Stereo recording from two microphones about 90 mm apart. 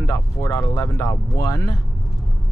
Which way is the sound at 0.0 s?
35° left (ahead or behind).